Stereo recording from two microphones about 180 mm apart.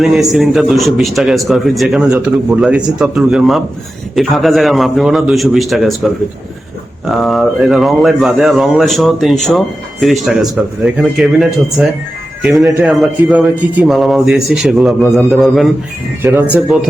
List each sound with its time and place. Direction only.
0.0 s speech: centre (ahead or behind)
7.2 s speech: centre (ahead or behind)
16.2 s speech: 10° right (ahead or behind)